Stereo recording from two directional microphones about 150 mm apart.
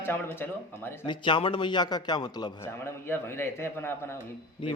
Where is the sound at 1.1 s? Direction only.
35° left (ahead or behind).